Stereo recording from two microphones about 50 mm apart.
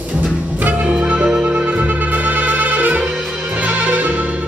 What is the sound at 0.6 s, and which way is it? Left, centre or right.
Music, right.